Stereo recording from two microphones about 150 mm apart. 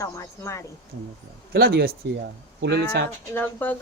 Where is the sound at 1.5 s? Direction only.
90° right.